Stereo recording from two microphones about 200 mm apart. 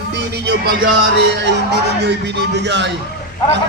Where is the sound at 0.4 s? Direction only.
50° right (ahead or behind).